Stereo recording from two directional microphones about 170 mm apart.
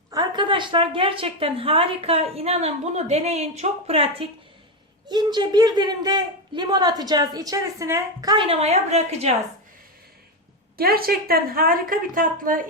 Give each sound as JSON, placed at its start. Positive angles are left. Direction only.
{"t": 0.1, "sound": "a woman's voice", "side_deg": -25}
{"t": 10.8, "sound": "a woman's voice", "side_deg": -60}